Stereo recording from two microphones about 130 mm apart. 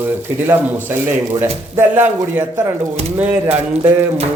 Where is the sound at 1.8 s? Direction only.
15° right (ahead or behind).